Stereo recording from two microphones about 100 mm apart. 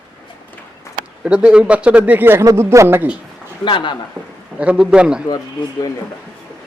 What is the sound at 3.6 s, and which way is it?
Speech, 55° left (ahead or behind).